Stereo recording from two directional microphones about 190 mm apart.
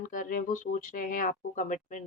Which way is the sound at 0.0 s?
45° left (ahead or behind).